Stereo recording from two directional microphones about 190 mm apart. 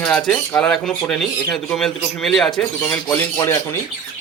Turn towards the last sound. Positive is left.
turn(degrees=15)  # may be behind; listen again after turning